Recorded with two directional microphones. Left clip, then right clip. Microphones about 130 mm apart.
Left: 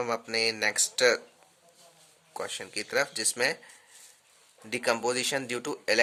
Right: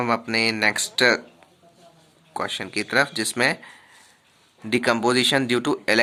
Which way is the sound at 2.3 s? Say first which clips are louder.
Right 8 dB; 30° left (ahead or behind).